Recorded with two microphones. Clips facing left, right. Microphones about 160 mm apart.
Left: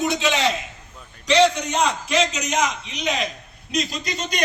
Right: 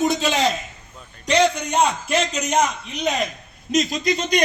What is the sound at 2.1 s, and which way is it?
A man's voice, 50° right (ahead or behind).